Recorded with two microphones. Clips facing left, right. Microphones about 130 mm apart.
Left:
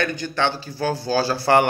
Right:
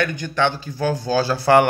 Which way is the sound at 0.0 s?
15° right (ahead or behind).